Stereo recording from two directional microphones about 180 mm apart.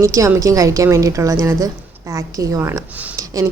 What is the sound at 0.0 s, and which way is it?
Speech, 15° right (ahead or behind).